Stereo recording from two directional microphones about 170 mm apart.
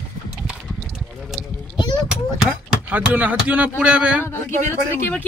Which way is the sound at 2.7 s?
5° right (ahead or behind).